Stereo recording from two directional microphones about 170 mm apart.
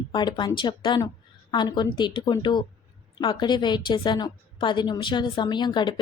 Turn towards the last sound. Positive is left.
turn(degrees=25)  # may be behind; listen again after turning